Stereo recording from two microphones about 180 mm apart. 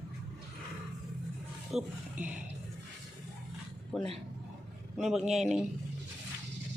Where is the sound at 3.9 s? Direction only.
Centre (ahead or behind).